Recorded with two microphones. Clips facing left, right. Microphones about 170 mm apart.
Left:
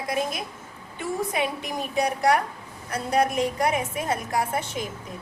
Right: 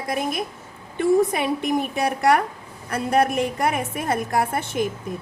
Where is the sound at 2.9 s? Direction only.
55° right (ahead or behind).